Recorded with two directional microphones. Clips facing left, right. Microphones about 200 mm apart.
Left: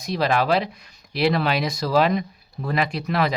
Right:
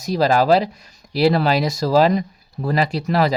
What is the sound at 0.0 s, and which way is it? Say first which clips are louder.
Speech: right 5 dB; 40° right (ahead or behind).